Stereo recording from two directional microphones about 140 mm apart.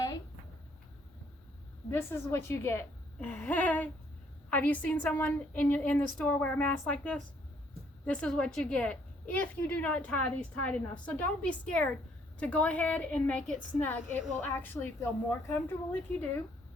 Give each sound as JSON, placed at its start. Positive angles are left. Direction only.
{"t": 1.9, "sound": "a woman's voice", "side_deg": 15}